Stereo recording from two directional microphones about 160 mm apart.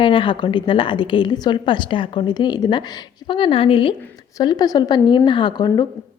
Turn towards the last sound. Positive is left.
turn(degrees=25)  # may be behind; listen again after turning